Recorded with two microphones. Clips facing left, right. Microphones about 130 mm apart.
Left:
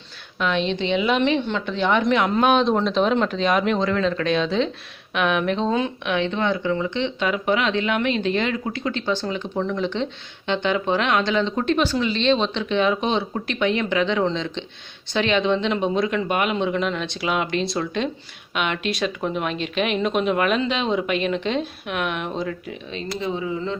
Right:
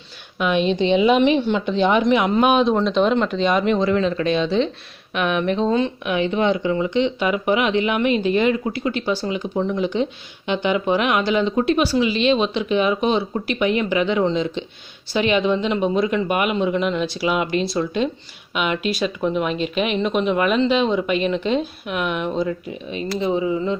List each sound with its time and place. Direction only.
0.3 s speech: 15° right (ahead or behind)
6.1 s speech: 10° right (ahead or behind)
22.4 s speech: 15° right (ahead or behind)